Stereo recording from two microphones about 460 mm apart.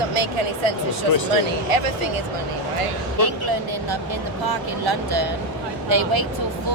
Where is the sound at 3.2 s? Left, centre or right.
Right.